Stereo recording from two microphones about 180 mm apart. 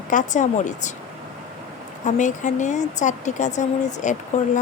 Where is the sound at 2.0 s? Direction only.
45° left (ahead or behind).